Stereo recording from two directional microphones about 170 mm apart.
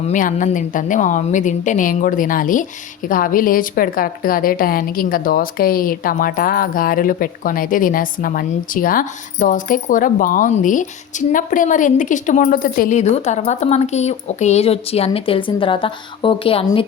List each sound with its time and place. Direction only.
0.1 s a woman's voice: 50° left (ahead or behind); by 16.8 s 30° left (ahead or behind)